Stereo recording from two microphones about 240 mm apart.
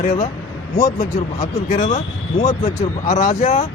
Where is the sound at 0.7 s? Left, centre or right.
Left.